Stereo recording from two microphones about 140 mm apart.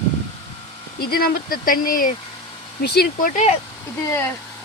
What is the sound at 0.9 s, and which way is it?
Speech, 90° left.